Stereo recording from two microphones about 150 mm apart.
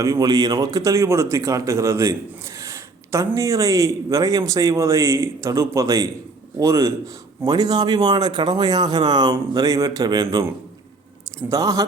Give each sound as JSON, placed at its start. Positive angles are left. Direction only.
{"t": 0.0, "sound": "a man's voice", "side_deg": -25}
{"t": 11.4, "sound": "a man's voice", "side_deg": -25}